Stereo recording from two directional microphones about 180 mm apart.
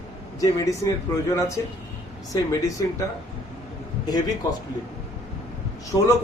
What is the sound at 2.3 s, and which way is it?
Speech, 20° left (ahead or behind).